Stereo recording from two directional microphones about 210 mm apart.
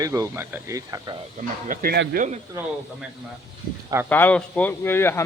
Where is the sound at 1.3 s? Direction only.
40° right (ahead or behind).